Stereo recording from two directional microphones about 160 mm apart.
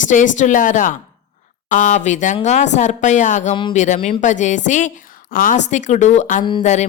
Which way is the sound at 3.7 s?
50° left (ahead or behind).